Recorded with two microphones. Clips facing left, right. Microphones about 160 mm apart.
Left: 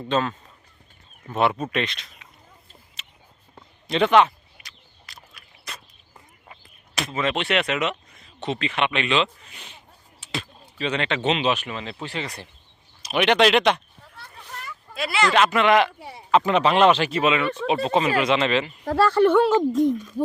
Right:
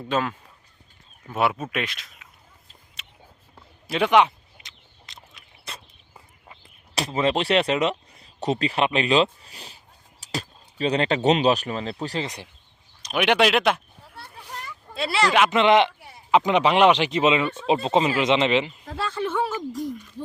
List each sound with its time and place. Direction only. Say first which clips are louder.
0.1 s speech: left 1 dB; 10° right (ahead or behind)
3.0 s a sound: right 2 dB; centre (ahead or behind)
3.8 s a sound: left 1 dB; 10° right (ahead or behind); by 5.8 s 25° right (ahead or behind)
6.9 s speech: right 3 dB; 30° right (ahead or behind)
12.2 s speech: right 1 dB; 20° right (ahead or behind)
13.1 s speech: left 2 dB; 5° right (ahead or behind)
14.9 s speech: even; 30° right (ahead or behind)
15.3 s speech: left 1 dB; 10° right (ahead or behind)
15.5 s speech: right 3 dB; 25° right (ahead or behind)
16.0 s speech: left 7 dB; 65° left (ahead or behind)
16.3 s speech: even; 15° right (ahead or behind)
18.9 s speech: left 11 dB; 80° left